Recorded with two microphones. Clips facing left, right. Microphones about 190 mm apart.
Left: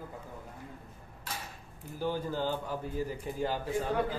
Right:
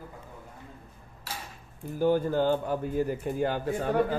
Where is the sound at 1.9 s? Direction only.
50° right (ahead or behind).